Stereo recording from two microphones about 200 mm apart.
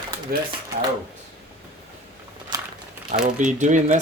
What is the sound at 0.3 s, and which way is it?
Speech, 50° right (ahead or behind).